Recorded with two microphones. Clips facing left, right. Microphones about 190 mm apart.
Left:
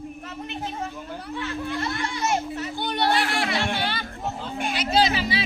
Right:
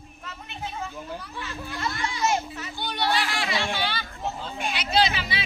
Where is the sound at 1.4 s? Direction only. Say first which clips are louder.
Left 10 dB; 60° left (ahead or behind).